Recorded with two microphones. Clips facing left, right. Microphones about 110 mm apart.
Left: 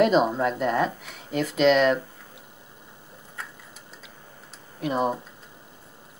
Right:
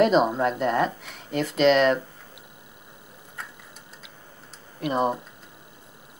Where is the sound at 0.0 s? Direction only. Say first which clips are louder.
Right 1 dB; centre (ahead or behind).